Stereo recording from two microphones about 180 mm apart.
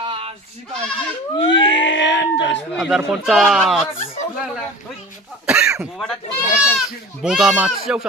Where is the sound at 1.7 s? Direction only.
90° left.